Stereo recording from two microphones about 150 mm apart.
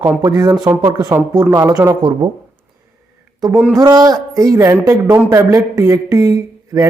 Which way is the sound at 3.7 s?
25° right (ahead or behind).